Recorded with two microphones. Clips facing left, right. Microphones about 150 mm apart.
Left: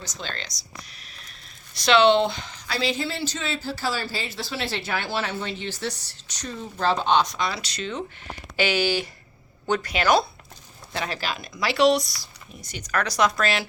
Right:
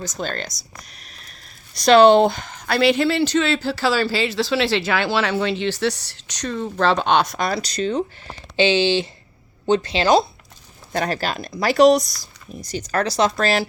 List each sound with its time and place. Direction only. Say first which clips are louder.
0.0 s speech: right 8 dB; 45° right (ahead or behind); by 10.2 s 25° right (ahead or behind)
10.9 s speech: right 6 dB; 45° right (ahead or behind)
12.9 s speech: right 3 dB; 30° right (ahead or behind)